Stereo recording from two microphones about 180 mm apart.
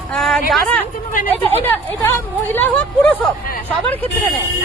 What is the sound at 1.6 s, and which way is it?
Speech, 10° left (ahead or behind).